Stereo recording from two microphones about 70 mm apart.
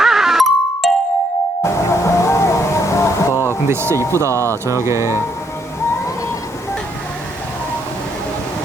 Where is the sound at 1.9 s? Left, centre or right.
Left.